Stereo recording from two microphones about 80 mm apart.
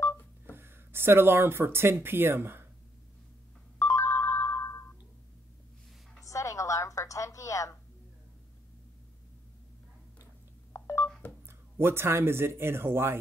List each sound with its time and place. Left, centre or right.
0.0 s telephone dialing: left
0.5 s speech: right
3.8 s ringtone: left
6.2 s a sound: left
10.7 s telephone dialing: left
11.4 s speech: right